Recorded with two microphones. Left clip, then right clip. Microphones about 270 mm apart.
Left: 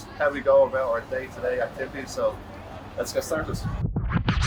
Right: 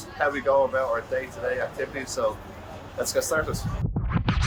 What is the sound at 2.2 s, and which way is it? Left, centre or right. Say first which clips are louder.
Speech: left 1 dB; centre.